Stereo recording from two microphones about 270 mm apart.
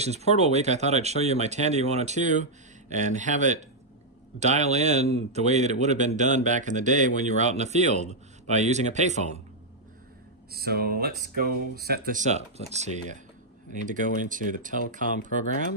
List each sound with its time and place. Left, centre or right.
0.0 s a man's voice: right
10.5 s a man's voice: right